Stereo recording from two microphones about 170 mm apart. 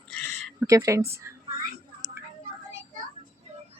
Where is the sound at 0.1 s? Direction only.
5° left (ahead or behind).